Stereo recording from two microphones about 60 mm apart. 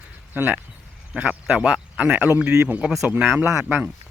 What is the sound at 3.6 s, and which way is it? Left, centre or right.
Speech, right.